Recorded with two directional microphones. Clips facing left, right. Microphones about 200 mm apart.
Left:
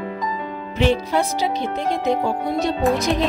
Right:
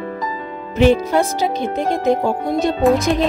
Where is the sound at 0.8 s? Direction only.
45° right (ahead or behind).